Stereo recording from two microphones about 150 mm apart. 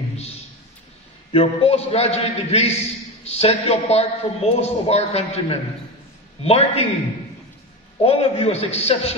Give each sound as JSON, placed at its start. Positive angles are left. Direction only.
{"t": 1.3, "sound": "a man's voice", "side_deg": 40}
{"t": 8.0, "sound": "a man's voice", "side_deg": 40}